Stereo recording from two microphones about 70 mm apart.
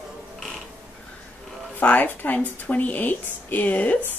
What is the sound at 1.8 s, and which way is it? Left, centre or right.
Speech, left.